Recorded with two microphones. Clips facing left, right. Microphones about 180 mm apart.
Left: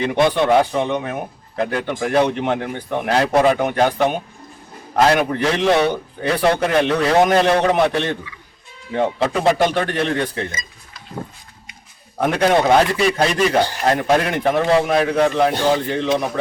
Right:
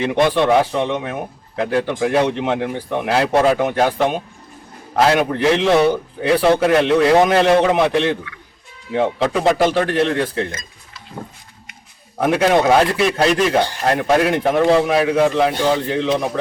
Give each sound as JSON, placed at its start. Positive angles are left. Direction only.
{"t": 0.0, "sound": "a man's voice", "side_deg": 0}
{"t": 8.3, "sound": "speech", "side_deg": -65}
{"t": 8.9, "sound": "a man's voice", "side_deg": 0}
{"t": 12.2, "sound": "a man's voice", "side_deg": -5}